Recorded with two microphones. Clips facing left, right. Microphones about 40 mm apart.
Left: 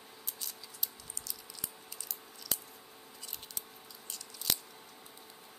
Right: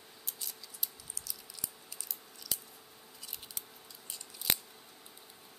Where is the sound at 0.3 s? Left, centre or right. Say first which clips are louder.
Even; centre.